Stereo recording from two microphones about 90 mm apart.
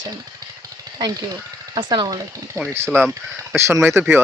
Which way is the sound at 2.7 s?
25° right (ahead or behind).